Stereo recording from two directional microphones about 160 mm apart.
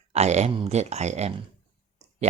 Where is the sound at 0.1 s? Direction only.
45° right (ahead or behind).